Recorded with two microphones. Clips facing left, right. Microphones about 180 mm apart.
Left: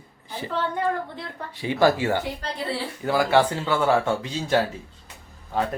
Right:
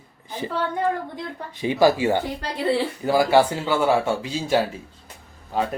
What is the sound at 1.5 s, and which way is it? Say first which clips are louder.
Speech: right 2 dB; 15° right (ahead or behind).